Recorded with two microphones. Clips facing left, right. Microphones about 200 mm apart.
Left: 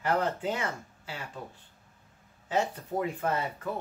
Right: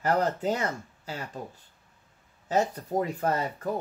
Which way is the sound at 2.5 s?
40° right (ahead or behind).